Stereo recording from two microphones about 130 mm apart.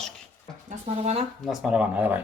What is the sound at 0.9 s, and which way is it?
Speech, 50° right (ahead or behind).